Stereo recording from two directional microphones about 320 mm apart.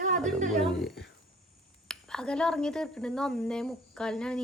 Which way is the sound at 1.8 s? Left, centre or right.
Centre.